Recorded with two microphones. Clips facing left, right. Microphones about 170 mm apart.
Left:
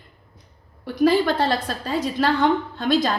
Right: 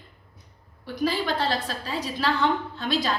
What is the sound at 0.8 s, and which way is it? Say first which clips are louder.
A woman's voice: left 8 dB; 55° left (ahead or behind).